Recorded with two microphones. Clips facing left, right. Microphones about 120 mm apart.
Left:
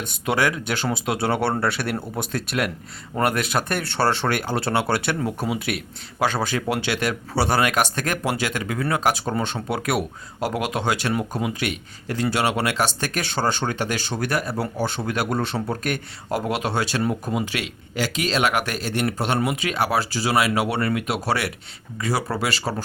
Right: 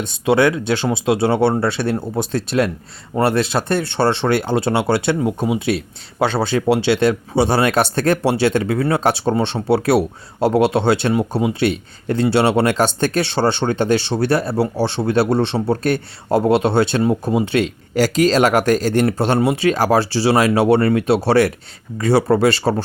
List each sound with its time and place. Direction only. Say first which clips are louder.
0.0 s speech: right 7 dB; 25° right (ahead or behind)